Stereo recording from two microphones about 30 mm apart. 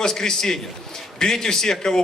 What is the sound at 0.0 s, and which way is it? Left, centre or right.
A man's voice, centre.